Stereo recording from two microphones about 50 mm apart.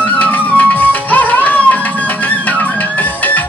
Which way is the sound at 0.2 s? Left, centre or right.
Left.